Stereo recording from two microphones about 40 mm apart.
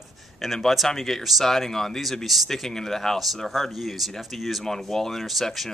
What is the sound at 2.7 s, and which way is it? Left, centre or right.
Speech, centre.